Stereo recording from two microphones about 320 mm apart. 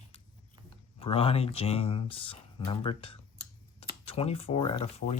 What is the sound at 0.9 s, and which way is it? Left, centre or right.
Speech, centre.